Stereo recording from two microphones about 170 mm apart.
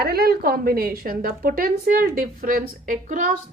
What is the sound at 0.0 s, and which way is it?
A woman's voice, 65° right (ahead or behind).